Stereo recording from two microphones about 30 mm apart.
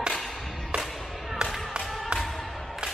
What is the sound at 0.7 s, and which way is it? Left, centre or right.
Music, right.